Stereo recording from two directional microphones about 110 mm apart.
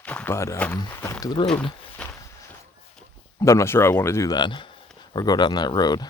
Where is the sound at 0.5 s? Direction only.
15° left (ahead or behind).